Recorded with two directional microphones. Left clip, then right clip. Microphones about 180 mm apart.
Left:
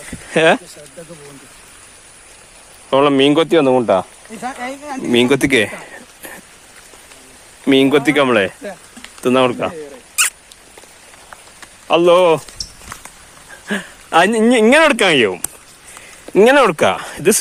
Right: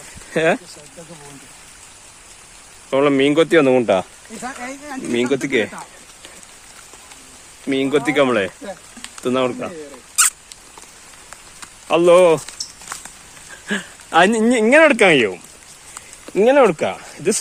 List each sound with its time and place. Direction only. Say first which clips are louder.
0.3 s speech: left 5 dB; 15° left (ahead or behind)
2.9 s speech: left 3 dB; 15° left (ahead or behind)
3.6 s speech: left 1 dB; 5° left (ahead or behind)
4.4 s speech: left 5 dB; 30° left (ahead or behind)
7.7 s speech: left 6 dB; 30° left (ahead or behind)
11.9 s speech: left 1 dB; 5° left (ahead or behind)
13.7 s speech: left 2 dB; 5° left (ahead or behind); by 17.4 s 25° left (ahead or behind)